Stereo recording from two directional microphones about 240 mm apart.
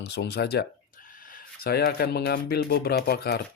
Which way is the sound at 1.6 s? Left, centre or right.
Left.